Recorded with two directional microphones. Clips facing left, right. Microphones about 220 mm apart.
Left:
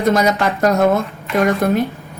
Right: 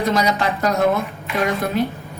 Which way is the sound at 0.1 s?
50° left (ahead or behind).